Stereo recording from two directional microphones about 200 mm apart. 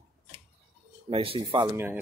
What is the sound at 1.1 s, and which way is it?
Speech, 25° right (ahead or behind).